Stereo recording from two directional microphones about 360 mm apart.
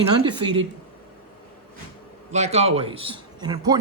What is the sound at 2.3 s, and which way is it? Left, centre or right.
A man's voice, centre.